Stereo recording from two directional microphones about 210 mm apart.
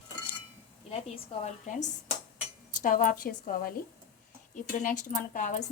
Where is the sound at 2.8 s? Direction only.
40° left (ahead or behind).